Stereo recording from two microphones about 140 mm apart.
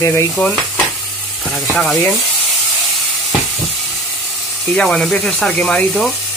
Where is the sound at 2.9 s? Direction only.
Centre (ahead or behind).